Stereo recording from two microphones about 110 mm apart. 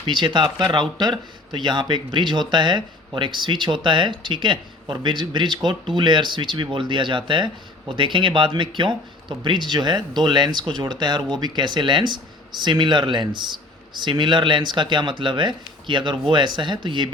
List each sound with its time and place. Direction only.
0.0 s speech: 45° right (ahead or behind)